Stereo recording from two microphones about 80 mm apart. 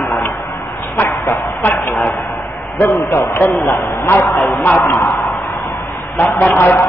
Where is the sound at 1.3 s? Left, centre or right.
Left.